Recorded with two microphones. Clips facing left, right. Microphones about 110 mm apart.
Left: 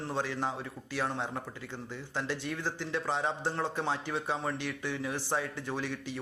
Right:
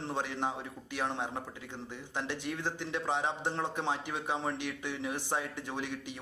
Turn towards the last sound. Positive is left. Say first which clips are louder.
# left 2 dB
turn(degrees=-20)  # may be behind; listen again after turning